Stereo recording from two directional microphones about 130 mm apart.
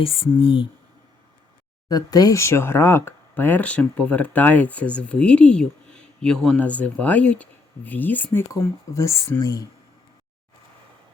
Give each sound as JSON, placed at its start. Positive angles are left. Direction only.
{"t": 0.0, "sound": "speech", "side_deg": 45}
{"t": 1.9, "sound": "speech", "side_deg": 30}